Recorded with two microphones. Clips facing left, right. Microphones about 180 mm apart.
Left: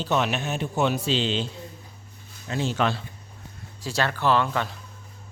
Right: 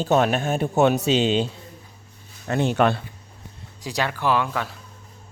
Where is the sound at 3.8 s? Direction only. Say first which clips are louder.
Even; 15° right (ahead or behind).